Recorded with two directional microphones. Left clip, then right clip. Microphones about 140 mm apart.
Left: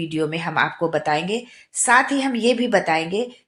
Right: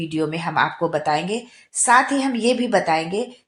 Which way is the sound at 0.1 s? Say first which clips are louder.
Right 1 dB; 30° right (ahead or behind).